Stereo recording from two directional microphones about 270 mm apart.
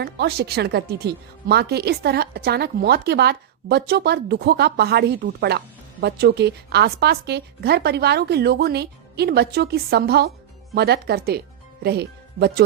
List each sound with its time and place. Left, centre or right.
0.0 s a woman's voice: right